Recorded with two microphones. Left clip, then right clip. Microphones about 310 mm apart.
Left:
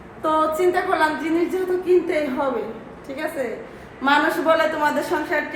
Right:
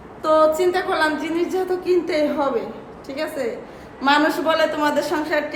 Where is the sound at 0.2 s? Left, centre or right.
Centre.